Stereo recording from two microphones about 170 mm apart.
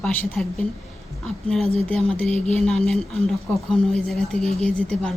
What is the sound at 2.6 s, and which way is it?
Speech, centre (ahead or behind).